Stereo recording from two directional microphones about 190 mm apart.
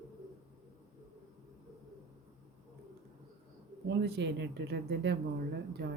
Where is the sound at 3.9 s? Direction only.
60° right (ahead or behind).